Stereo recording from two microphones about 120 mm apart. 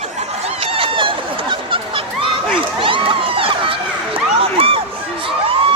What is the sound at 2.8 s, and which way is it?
Crowd, 45° right (ahead or behind).